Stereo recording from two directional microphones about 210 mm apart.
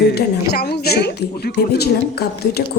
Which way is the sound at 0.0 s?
50° left (ahead or behind).